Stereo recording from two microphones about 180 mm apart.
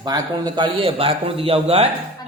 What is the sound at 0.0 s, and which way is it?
A man's voice, 25° right (ahead or behind).